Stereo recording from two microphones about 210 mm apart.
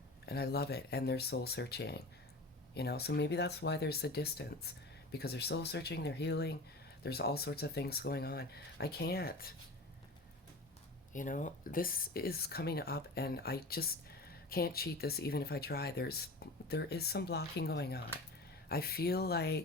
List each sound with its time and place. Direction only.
0.3 s speech: 50° left (ahead or behind)
11.1 s speech: 40° left (ahead or behind)